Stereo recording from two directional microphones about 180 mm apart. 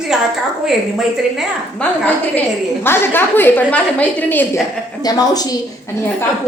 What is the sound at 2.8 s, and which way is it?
A woman's voice, 10° left (ahead or behind).